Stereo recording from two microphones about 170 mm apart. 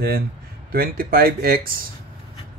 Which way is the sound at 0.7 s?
60° right (ahead or behind).